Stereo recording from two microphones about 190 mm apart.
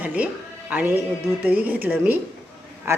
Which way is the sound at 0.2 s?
10° right (ahead or behind).